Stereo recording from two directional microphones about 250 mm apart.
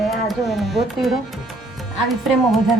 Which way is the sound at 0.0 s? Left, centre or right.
Centre.